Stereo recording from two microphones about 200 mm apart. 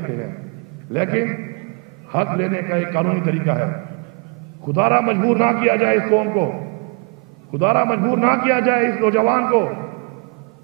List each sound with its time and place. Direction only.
0.9 s a man's voice: 15° right (ahead or behind)
4.7 s a man's voice: 15° right (ahead or behind)
7.6 s a man's voice: 15° right (ahead or behind)